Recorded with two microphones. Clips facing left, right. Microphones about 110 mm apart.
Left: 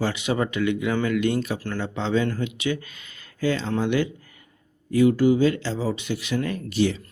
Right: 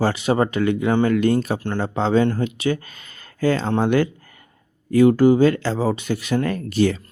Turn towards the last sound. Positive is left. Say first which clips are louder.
# right 4 dB
turn(degrees=-50)  # may be behind; listen again after turning